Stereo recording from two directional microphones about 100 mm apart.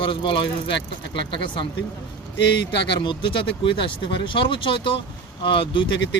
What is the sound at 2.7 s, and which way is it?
Speech, 55° left (ahead or behind).